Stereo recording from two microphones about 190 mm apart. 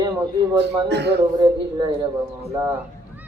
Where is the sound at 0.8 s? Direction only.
60° right (ahead or behind).